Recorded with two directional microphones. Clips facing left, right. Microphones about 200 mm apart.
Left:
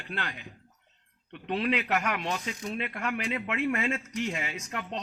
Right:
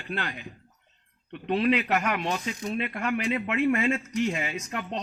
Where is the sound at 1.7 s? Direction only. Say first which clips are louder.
Right 3 dB; 40° right (ahead or behind).